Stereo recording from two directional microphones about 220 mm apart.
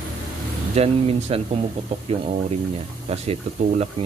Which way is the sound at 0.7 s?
30° right (ahead or behind).